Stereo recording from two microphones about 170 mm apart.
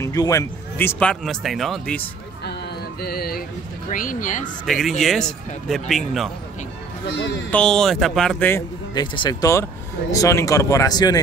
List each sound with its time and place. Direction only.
0.0 s speech: 20° left (ahead or behind); by 2.0 s 5° left (ahead or behind)
3.0 s speech: 65° left (ahead or behind)
3.9 s speech: 50° left (ahead or behind)
4.6 s speech: centre (ahead or behind)
7.5 s speech: 5° left (ahead or behind)
8.5 s speech: 15° left (ahead or behind)
9.0 s speech: 30° left (ahead or behind)